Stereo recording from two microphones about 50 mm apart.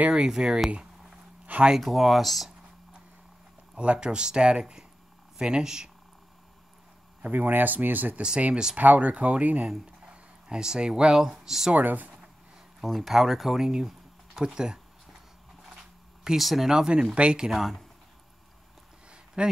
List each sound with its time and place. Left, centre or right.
0.1 s speech: centre
1.4 s a sound: right
1.8 s speech: centre
3.7 s speech: right
7.2 s speech: right
10.0 s speech: centre
11.7 s speech: right
12.8 s speech: centre
16.3 s speech: centre
16.7 s speech: centre
17.5 s speech: centre
19.0 s a sound: centre